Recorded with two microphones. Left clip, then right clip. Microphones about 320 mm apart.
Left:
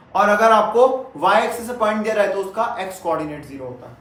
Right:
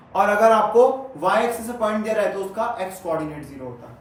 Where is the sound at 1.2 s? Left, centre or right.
Centre.